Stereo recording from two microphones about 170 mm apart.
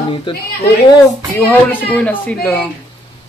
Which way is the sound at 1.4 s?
10° left (ahead or behind).